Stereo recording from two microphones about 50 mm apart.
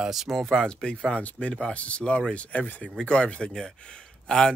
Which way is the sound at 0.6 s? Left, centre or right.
Centre.